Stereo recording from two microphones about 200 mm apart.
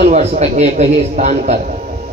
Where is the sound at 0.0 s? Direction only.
35° right (ahead or behind).